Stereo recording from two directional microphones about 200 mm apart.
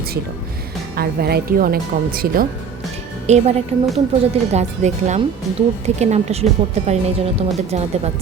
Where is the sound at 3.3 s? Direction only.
35° right (ahead or behind).